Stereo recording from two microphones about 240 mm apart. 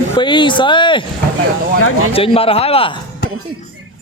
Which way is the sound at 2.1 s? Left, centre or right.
Left.